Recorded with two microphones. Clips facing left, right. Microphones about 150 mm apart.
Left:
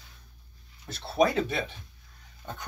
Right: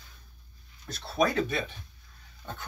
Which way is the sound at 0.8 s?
30° left (ahead or behind).